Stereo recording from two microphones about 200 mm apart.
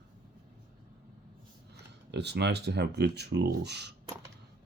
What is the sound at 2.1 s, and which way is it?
Speech, 60° right (ahead or behind).